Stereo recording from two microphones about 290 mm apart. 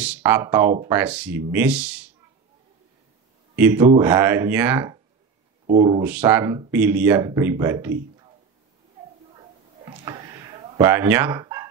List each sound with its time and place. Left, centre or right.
0.0 s speech: centre
3.5 s speech: centre
9.8 s a sound: centre